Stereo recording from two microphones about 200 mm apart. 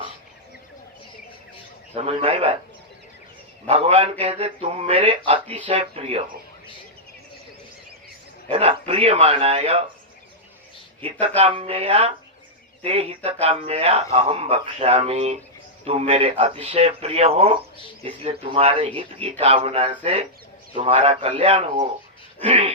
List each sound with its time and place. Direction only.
2.0 s a man's voice: 30° right (ahead or behind)
3.7 s a man's voice: 30° right (ahead or behind)
8.4 s a man's voice: 30° right (ahead or behind)
11.0 s a man's voice: 30° right (ahead or behind)